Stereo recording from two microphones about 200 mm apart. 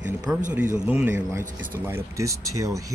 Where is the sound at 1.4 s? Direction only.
45° right (ahead or behind).